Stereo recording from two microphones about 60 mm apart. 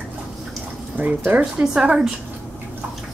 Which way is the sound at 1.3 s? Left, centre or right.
Right.